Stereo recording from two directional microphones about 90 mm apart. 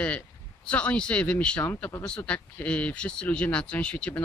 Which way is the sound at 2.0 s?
10° left (ahead or behind).